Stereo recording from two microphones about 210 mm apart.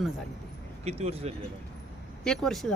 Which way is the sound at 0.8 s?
30° right (ahead or behind).